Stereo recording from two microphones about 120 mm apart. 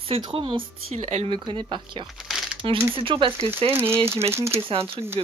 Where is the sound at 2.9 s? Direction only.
45° right (ahead or behind).